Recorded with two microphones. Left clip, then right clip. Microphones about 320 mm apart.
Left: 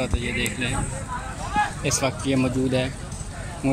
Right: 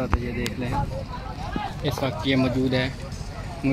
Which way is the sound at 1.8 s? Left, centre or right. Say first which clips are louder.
Left 2 dB; centre.